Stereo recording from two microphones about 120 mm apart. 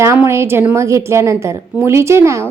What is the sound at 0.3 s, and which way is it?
A woman's voice, 20° right (ahead or behind).